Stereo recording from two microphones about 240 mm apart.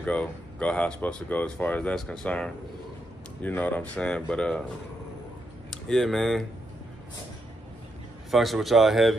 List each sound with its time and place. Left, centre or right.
0.0 s speech: centre
5.9 s speech: centre
8.3 s speech: centre